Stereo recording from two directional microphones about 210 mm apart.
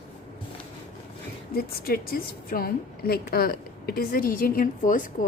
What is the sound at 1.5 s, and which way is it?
A woman's voice, 45° left (ahead or behind).